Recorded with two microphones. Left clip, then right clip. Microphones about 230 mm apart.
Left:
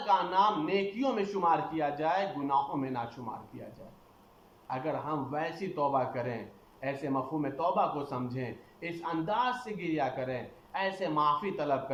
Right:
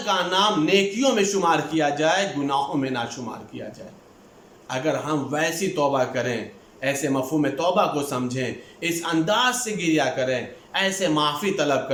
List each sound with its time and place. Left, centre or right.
0.0 s a man's voice: right
4.7 s a man's voice: right